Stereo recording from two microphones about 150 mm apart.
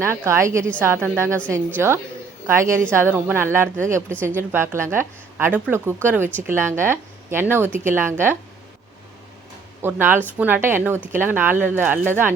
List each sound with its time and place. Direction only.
0.0 s a woman's voice: 15° right (ahead or behind)
9.8 s speech: 15° right (ahead or behind)